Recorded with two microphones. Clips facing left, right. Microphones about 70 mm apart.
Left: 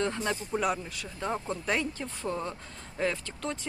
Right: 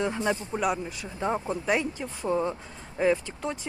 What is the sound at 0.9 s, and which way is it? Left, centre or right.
Speech, centre.